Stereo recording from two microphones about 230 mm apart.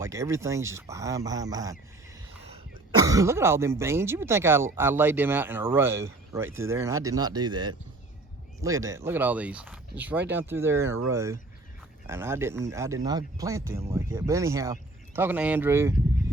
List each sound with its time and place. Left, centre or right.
0.0 s speech: centre
3.0 s speech: centre